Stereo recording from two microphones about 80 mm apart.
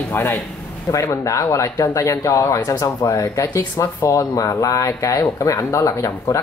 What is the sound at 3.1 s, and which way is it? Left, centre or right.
Speech, left.